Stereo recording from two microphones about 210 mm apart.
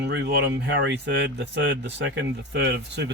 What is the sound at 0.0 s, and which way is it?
Speech, 55° right (ahead or behind).